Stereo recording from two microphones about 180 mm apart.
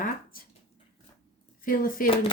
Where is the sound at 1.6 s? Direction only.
50° left (ahead or behind).